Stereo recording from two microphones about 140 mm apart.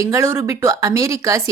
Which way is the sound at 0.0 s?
20° right (ahead or behind).